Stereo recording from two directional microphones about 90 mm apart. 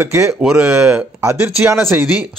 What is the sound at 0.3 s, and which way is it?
Speech, 5° right (ahead or behind).